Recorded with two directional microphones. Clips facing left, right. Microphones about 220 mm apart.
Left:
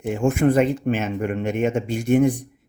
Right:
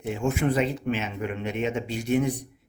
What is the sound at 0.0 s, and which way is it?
Speech, 50° left (ahead or behind).